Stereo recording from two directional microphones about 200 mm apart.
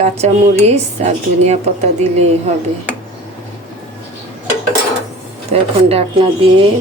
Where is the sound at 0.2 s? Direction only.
35° right (ahead or behind).